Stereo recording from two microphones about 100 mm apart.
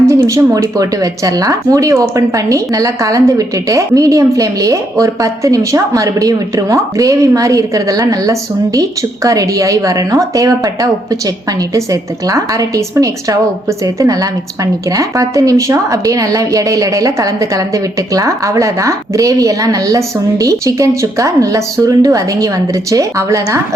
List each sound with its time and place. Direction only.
0.0 s speech: 30° right (ahead or behind)